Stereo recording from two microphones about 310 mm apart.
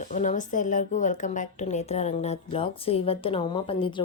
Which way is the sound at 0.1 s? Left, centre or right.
Left.